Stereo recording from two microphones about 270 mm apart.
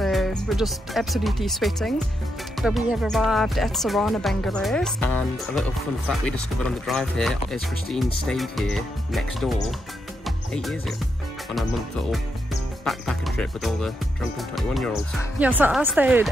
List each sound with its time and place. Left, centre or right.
0.0 s speech: centre
12.8 s speech: centre